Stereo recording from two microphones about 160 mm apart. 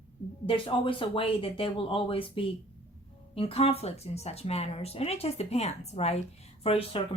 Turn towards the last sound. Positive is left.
turn(degrees=40)  # may be behind; listen again after turning